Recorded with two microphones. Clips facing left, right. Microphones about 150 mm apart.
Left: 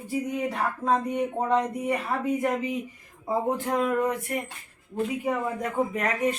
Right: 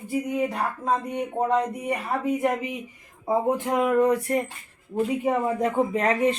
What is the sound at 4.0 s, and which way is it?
Speech, 30° right (ahead or behind).